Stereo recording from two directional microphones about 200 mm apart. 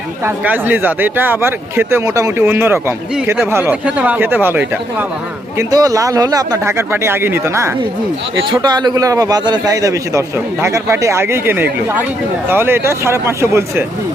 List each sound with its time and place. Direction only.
0.3 s a man's voice: 10° right (ahead or behind)